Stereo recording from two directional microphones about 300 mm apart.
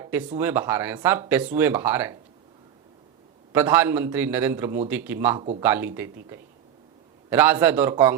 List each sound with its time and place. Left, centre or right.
0.0 s a sound: centre
0.3 s a man's voice: centre
3.5 s a man's voice: centre
5.4 s speech: centre
5.6 s a man's voice: centre
7.3 s a man's voice: centre